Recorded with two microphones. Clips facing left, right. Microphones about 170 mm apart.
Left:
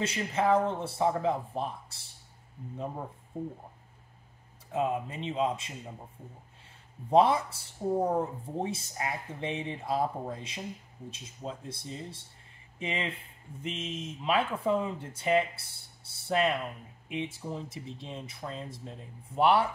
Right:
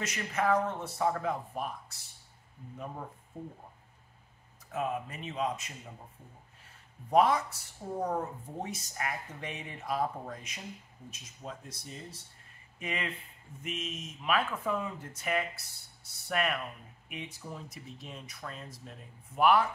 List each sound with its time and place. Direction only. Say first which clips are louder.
0.0 s speech: left 3 dB; 30° left (ahead or behind)
4.7 s speech: left 4 dB; 25° left (ahead or behind)
7.1 s speech: left 2 dB; 30° left (ahead or behind)